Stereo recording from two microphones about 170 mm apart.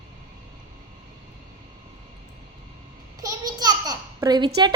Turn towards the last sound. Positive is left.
turn(degrees=-25)  # may be behind; listen again after turning